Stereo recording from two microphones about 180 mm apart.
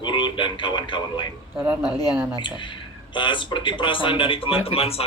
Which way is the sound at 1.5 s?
5° right (ahead or behind).